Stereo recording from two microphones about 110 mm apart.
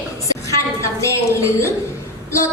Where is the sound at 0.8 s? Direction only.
25° left (ahead or behind).